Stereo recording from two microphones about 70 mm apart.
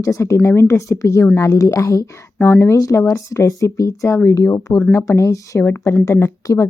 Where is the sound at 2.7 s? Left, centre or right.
Left.